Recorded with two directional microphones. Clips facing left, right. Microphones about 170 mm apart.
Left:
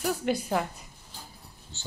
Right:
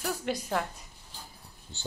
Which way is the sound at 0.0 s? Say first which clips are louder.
Left 4 dB; 5° left (ahead or behind).